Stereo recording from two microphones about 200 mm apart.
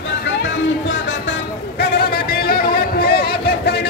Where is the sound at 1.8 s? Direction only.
50° left (ahead or behind).